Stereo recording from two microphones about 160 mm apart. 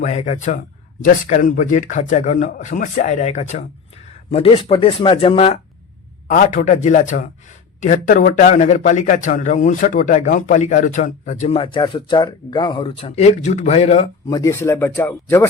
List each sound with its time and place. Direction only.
0.0 s a man's voice: 45° left (ahead or behind)
6.2 s a man's voice: 55° left (ahead or behind)
14.3 s speech: 20° left (ahead or behind)